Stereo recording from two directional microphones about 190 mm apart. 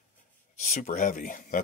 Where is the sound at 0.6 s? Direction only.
40° left (ahead or behind).